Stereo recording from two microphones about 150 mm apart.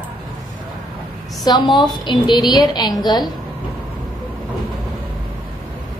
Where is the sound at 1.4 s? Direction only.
30° left (ahead or behind).